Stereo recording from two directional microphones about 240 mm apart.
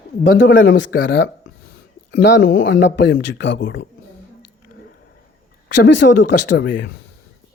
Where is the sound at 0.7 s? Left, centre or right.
Left.